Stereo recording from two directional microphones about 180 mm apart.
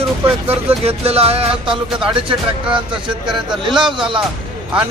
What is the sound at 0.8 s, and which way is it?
Music, 35° right (ahead or behind).